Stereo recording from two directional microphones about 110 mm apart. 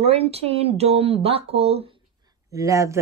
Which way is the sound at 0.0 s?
65° right (ahead or behind).